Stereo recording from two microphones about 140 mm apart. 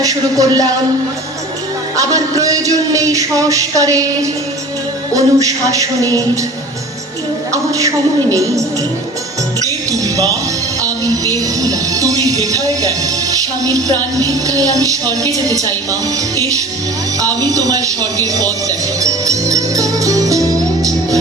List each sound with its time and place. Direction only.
0.0 s speech: 25° right (ahead or behind)
2.0 s speech: 25° right (ahead or behind)
7.5 s speech: 25° right (ahead or behind)
9.9 s music: 25° right (ahead or behind)
13.7 s speech: 25° right (ahead or behind)
17.4 s music: 25° right (ahead or behind)